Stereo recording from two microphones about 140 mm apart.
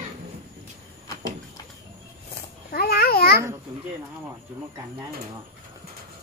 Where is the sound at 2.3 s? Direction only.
90° left.